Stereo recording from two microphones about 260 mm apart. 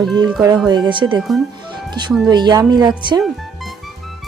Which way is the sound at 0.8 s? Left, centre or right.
Centre.